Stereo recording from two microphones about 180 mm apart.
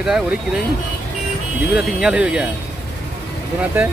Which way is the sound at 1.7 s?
5° right (ahead or behind).